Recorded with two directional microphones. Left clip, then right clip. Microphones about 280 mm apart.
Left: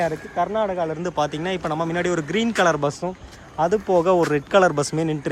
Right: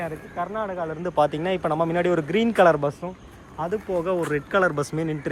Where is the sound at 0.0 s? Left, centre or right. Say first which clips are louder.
Left 7 dB; centre.